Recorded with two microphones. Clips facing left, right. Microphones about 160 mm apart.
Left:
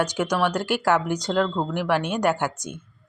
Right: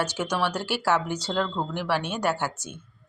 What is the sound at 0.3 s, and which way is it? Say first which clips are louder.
Speech: left 4 dB; 10° left (ahead or behind).